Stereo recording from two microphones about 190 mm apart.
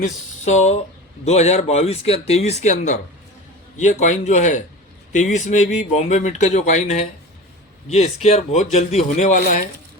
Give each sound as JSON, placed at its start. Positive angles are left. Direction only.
{"t": 0.0, "sound": "speech", "side_deg": 35}